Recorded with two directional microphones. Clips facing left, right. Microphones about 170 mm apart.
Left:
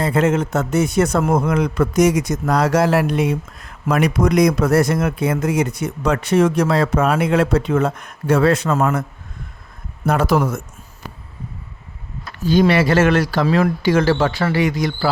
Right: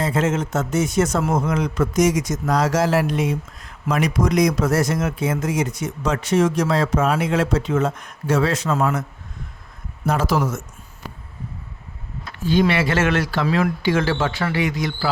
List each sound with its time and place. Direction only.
0.0 s a man's voice: 60° left (ahead or behind)
10.1 s a man's voice: 60° left (ahead or behind)
12.4 s speech: 40° left (ahead or behind)